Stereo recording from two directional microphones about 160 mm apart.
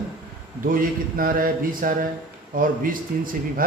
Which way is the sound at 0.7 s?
60° right (ahead or behind).